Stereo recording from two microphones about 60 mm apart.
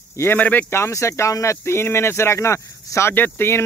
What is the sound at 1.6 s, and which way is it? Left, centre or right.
Speech, left.